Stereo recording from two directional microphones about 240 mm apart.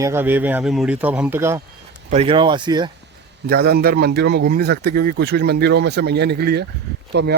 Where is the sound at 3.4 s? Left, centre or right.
Right.